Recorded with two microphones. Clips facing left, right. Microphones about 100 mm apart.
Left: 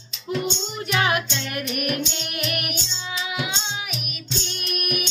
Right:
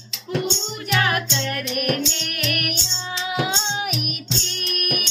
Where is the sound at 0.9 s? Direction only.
20° left (ahead or behind).